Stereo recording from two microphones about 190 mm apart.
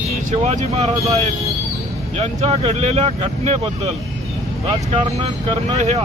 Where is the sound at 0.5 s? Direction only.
35° right (ahead or behind).